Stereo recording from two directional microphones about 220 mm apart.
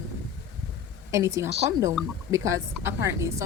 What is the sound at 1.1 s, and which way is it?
A woman's voice, 15° right (ahead or behind).